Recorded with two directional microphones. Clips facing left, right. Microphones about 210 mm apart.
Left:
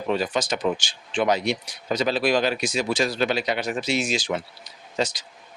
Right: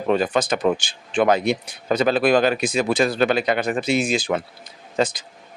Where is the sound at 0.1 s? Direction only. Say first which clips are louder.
Right 5 dB; 55° right (ahead or behind).